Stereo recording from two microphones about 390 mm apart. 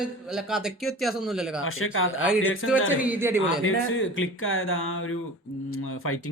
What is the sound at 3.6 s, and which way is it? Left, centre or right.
Speech, left.